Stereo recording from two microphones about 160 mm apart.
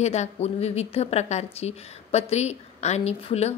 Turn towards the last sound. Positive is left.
turn(degrees=40)  # may be behind; listen again after turning